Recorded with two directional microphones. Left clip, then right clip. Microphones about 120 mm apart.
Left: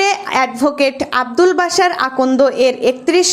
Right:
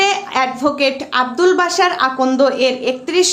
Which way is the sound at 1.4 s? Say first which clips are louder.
Left 2 dB; 45° left (ahead or behind).